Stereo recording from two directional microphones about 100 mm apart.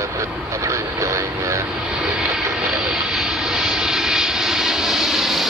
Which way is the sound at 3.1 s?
5° right (ahead or behind).